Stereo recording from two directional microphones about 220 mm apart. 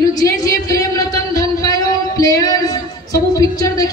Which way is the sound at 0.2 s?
15° left (ahead or behind).